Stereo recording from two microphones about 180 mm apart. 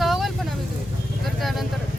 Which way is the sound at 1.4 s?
Centre (ahead or behind).